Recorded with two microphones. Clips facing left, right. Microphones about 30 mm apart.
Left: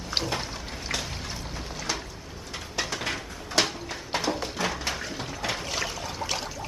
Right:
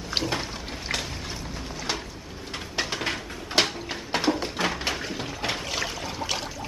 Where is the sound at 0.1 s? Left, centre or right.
Centre.